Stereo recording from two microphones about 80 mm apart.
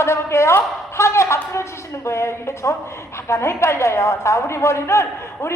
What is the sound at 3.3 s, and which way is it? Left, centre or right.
A woman's voice, left.